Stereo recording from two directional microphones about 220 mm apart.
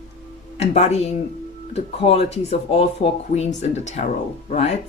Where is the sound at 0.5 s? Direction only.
30° left (ahead or behind).